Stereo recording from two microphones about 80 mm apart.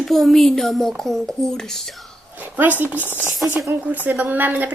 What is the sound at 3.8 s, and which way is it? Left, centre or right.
Speech, right.